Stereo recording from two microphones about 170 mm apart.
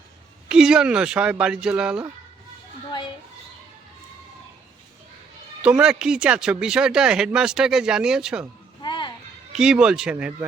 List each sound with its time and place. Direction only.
0.4 s speech: 5° right (ahead or behind)
5.6 s speech: 5° right (ahead or behind)
8.8 s music: 25° left (ahead or behind)
9.5 s speech: 5° right (ahead or behind)